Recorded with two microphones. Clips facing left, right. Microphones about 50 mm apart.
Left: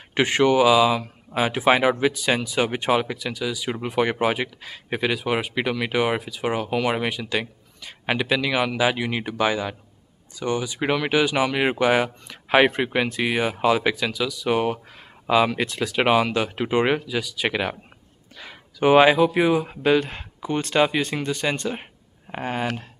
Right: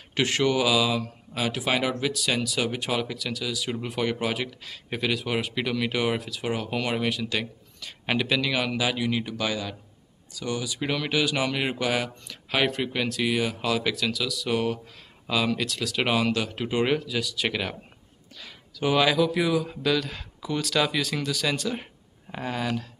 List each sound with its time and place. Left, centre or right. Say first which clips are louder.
0.1 s speech: left 5 dB; left
18.4 s speech: left 7 dB; left